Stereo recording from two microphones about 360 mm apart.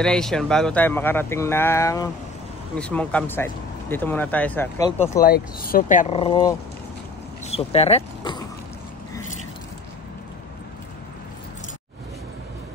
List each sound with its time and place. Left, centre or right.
0.0 s speech: centre
5.2 s speech: left